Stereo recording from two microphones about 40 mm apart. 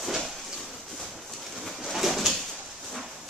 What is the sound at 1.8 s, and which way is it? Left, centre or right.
Bird, centre.